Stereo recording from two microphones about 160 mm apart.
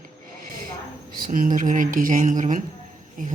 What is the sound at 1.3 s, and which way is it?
Speech, 55° right (ahead or behind).